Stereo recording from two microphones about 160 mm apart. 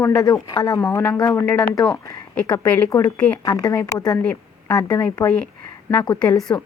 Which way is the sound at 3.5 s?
25° left (ahead or behind).